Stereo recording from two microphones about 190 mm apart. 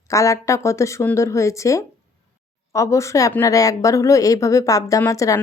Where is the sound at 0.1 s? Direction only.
15° left (ahead or behind).